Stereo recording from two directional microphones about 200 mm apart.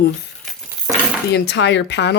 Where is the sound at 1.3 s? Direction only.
60° left (ahead or behind).